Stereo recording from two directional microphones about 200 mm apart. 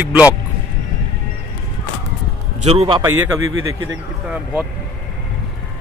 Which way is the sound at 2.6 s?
30° right (ahead or behind).